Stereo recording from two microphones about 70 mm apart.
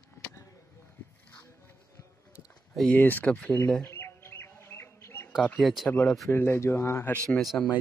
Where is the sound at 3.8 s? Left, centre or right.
Left.